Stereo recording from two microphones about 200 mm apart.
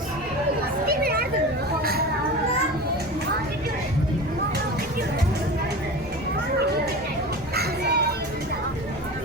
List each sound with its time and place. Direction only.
0.9 s chatter: 50° right (ahead or behind)
1.8 s a sound: 50° right (ahead or behind)
7.5 s children playing: 50° right (ahead or behind)